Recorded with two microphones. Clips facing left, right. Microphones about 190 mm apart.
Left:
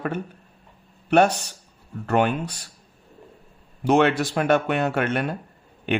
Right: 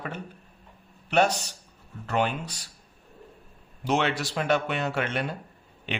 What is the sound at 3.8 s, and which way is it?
Speech, 55° left (ahead or behind).